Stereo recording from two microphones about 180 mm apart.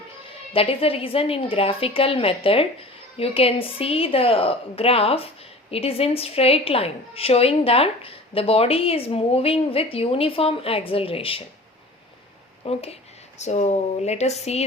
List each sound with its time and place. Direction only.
0.5 s a woman's voice: 30° left (ahead or behind)
12.6 s a woman's voice: 35° left (ahead or behind)